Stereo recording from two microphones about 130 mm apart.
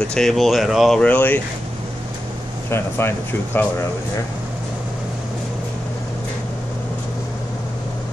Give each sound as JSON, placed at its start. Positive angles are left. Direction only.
{"t": 0.0, "sound": "speech", "side_deg": 5}
{"t": 1.0, "sound": "speech", "side_deg": 15}
{"t": 2.7, "sound": "speech", "side_deg": 20}